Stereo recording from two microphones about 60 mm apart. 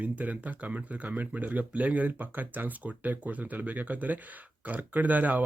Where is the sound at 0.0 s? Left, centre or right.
Right.